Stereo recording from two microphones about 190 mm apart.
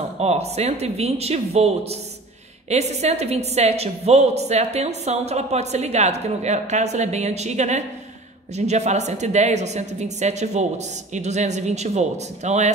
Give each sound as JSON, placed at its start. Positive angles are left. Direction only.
{"t": 0.2, "sound": "a woman's voice", "side_deg": -35}